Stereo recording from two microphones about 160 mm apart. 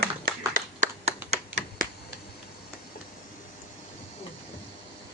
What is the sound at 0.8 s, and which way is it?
Finger snapping, 40° right (ahead or behind).